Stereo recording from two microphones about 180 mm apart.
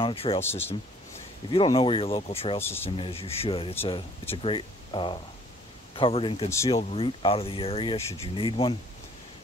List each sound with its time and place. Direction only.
0.0 s speech: 30° left (ahead or behind)
0.4 s speech: 10° left (ahead or behind)
1.5 s speech: 30° left (ahead or behind)
2.6 s speech: 15° left (ahead or behind)
3.0 s speech: 30° left (ahead or behind)